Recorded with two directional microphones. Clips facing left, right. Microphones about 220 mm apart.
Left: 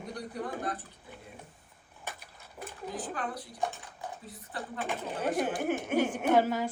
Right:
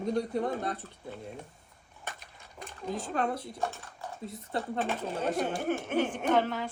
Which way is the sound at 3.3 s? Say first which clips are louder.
Right 4 dB; 25° right (ahead or behind).